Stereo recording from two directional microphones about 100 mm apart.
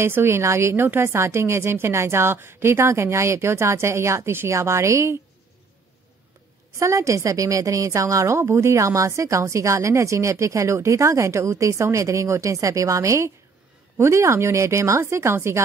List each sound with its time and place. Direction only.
0.0 s a woman's voice: 25° right (ahead or behind)
6.8 s a woman's voice: 30° right (ahead or behind)